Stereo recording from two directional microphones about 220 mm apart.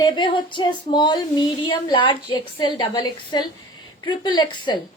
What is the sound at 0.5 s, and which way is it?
A woman's voice, 20° left (ahead or behind).